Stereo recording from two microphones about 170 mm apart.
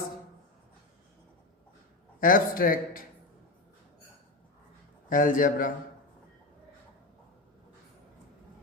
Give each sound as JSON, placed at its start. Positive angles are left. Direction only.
{"t": 2.2, "sound": "speech", "side_deg": 55}
{"t": 5.0, "sound": "a man's voice", "side_deg": 55}